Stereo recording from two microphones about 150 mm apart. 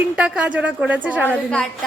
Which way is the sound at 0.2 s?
10° right (ahead or behind).